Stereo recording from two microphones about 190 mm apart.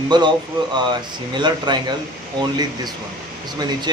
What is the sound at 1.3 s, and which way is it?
Speech, 25° right (ahead or behind).